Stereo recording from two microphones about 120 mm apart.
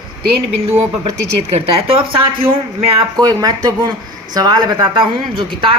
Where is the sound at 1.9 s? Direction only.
50° right (ahead or behind).